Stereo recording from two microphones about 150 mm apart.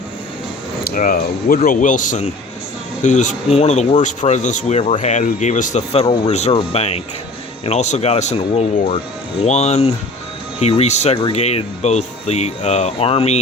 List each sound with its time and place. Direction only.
0.9 s speech: 70° left (ahead or behind); by 5.8 s 55° left (ahead or behind)
5.9 s speech: 45° left (ahead or behind)